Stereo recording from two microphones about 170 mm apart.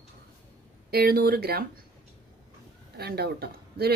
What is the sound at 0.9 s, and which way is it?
Speech, 65° right (ahead or behind).